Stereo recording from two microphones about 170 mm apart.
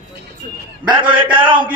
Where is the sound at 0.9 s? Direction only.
30° right (ahead or behind).